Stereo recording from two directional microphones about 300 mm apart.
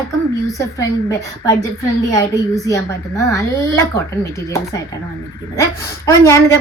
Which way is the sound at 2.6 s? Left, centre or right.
Centre.